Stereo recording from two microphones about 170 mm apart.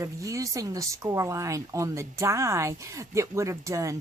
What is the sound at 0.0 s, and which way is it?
Speech, 20° right (ahead or behind).